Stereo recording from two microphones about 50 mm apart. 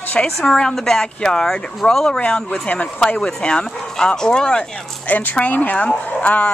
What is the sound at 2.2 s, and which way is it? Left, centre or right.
Speech, left.